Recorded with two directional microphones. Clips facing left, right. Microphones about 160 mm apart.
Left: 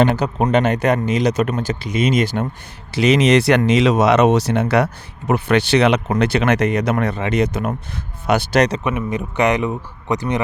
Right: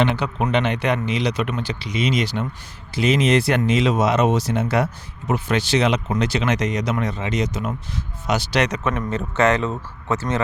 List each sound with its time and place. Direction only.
0.2 s speech: 40° left (ahead or behind)
2.9 s speech: 75° left (ahead or behind); by 8.6 s 55° left (ahead or behind)
8.8 s speech: 15° left (ahead or behind)